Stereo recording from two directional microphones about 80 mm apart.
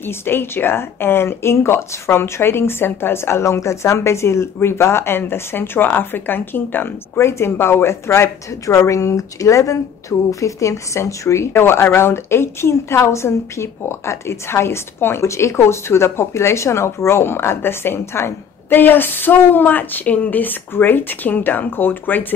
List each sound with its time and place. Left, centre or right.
0.0 s speech: left